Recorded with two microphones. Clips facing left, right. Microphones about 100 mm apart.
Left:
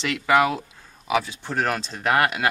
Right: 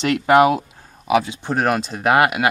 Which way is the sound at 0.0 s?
55° right (ahead or behind).